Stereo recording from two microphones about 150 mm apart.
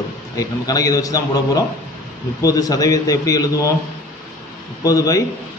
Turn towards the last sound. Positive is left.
turn(degrees=25)  # may be behind; listen again after turning